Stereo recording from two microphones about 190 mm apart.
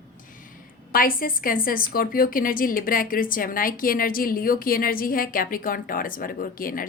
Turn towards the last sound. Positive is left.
turn(degrees=45)  # may be behind; listen again after turning